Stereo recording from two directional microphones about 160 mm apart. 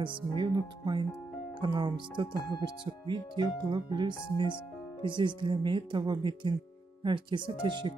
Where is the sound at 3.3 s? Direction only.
25° right (ahead or behind).